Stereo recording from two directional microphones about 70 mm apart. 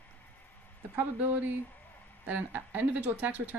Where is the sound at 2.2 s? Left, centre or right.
Right.